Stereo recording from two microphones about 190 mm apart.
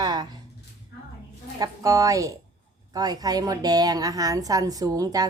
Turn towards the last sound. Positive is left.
turn(degrees=-20)  # may be behind; listen again after turning